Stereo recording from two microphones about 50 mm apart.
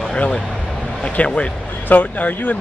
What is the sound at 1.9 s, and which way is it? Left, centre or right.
Speech, left.